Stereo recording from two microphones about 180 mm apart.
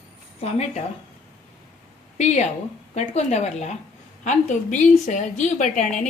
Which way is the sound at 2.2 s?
40° left (ahead or behind).